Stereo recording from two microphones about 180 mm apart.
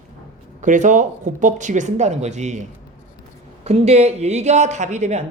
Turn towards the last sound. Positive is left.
turn(degrees=-40)  # may be behind; listen again after turning